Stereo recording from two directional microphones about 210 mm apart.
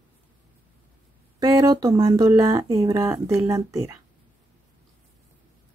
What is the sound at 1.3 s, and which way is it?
Speech, 15° right (ahead or behind).